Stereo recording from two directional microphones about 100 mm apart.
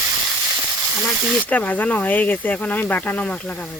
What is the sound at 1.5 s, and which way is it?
Speech, 15° left (ahead or behind).